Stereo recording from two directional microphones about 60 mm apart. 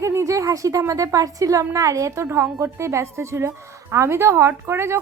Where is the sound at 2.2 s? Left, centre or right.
Right.